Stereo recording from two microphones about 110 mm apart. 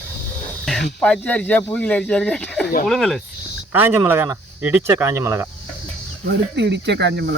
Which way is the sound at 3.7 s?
15° right (ahead or behind).